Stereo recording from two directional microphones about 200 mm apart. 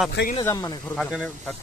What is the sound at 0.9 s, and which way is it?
Speech, centre (ahead or behind).